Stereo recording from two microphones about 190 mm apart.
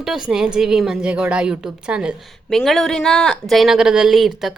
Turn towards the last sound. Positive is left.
turn(degrees=0)  # may be behind; listen again after turning